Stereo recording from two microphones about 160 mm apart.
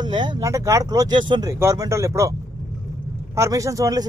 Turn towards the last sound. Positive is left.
turn(degrees=-20)  # may be behind; listen again after turning